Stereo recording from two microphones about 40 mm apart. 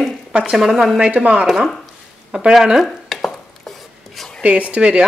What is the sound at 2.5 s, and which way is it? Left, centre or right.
Speech, centre.